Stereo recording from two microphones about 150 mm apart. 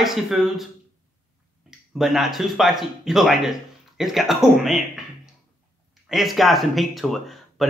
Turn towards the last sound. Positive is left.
turn(degrees=0)  # may be behind; listen again after turning